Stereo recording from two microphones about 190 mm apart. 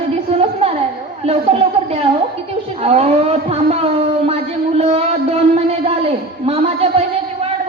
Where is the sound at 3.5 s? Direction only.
35° right (ahead or behind).